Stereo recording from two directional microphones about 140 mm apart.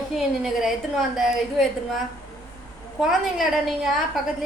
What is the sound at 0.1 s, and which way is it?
A woman's voice, centre (ahead or behind).